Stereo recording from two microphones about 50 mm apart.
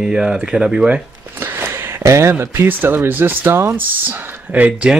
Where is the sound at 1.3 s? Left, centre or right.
Right.